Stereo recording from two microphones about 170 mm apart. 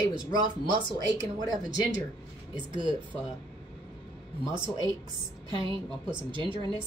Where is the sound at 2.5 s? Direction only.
25° right (ahead or behind).